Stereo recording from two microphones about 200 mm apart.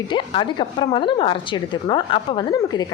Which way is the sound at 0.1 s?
25° left (ahead or behind).